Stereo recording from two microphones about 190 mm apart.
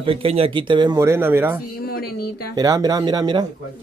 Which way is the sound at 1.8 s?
55° left (ahead or behind).